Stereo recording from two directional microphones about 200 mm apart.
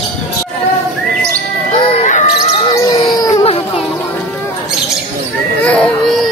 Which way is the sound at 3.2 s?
20° left (ahead or behind).